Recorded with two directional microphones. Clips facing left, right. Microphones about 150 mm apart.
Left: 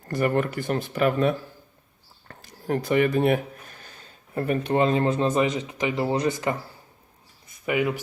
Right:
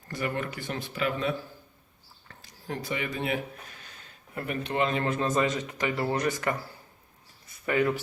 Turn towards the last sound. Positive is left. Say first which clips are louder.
# left 1 dB
turn(degrees=15)  # may be behind; listen again after turning